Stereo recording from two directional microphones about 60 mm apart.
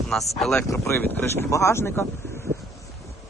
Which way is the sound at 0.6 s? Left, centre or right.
Left.